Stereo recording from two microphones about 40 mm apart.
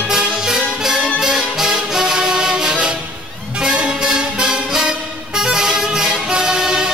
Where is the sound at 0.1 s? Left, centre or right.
Centre.